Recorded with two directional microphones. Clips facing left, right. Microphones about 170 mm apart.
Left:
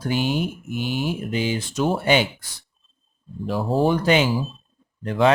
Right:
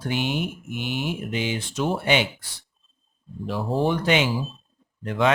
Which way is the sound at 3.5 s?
40° left (ahead or behind).